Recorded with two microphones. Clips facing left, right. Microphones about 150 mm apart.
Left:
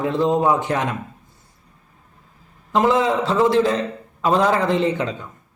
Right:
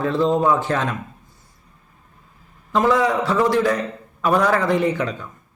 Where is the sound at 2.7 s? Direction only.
20° left (ahead or behind).